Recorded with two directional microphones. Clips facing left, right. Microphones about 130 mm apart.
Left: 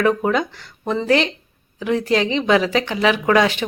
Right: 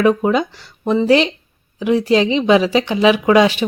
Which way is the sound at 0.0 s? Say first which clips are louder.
Right 3 dB; 15° right (ahead or behind).